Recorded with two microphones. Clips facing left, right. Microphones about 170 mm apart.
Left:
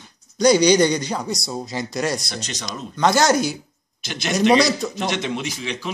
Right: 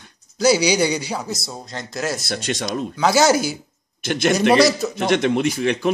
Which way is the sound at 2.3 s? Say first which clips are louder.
Right 7 dB; 50° right (ahead or behind).